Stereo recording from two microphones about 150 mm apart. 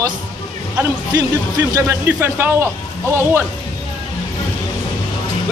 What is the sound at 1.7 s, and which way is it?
A man's voice, 20° right (ahead or behind).